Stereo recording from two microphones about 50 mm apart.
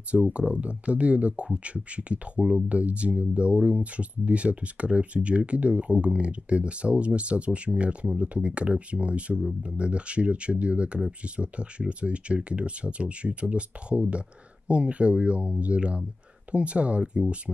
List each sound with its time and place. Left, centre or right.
0.3 s speech: right